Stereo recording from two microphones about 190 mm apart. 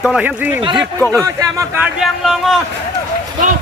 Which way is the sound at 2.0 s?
Centre (ahead or behind).